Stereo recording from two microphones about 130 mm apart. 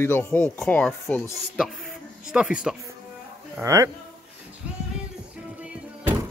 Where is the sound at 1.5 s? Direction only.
5° right (ahead or behind).